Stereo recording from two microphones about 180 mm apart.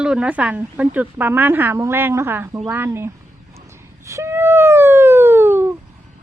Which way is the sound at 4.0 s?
15° right (ahead or behind).